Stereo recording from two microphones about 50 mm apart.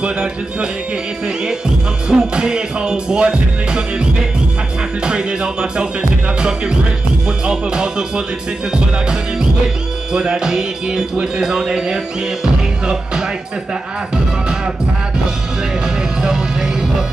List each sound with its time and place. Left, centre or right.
0.0 s speech: centre
1.2 s music: centre
15.8 s music: centre